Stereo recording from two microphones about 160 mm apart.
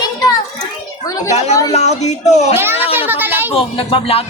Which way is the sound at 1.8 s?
45° left (ahead or behind).